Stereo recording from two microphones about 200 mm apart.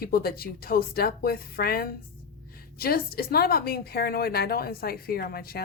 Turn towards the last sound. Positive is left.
turn(degrees=50)  # may be behind; listen again after turning